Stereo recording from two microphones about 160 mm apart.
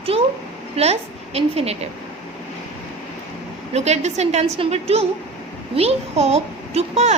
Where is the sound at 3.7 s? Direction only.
45° right (ahead or behind).